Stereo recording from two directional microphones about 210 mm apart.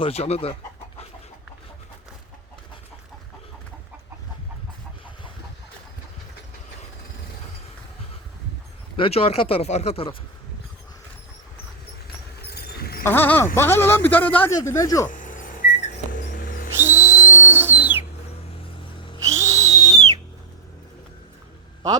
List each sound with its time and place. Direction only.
0.0 s speech: 30° left (ahead or behind)
9.0 s speech: 30° left (ahead or behind)
12.5 s a sound: 45° left (ahead or behind)
13.0 s speech: 10° left (ahead or behind)
15.1 s a sound: 40° left (ahead or behind)
16.7 s whistle: 10° right (ahead or behind)
19.2 s owl: 15° right (ahead or behind)